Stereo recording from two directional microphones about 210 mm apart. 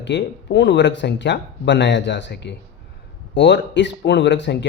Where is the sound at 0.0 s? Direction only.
60° left (ahead or behind).